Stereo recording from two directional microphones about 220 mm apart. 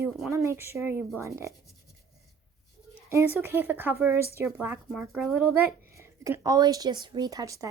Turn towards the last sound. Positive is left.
turn(degrees=-15)  # may be behind; listen again after turning